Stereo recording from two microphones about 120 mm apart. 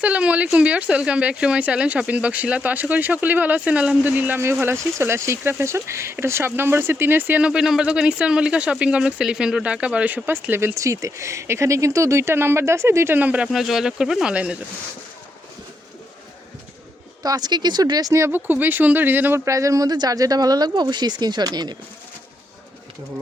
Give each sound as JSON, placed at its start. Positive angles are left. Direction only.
{"t": 0.0, "sound": "speech", "side_deg": -10}
{"t": 13.5, "sound": "speech", "side_deg": 0}
{"t": 17.2, "sound": "speech", "side_deg": -35}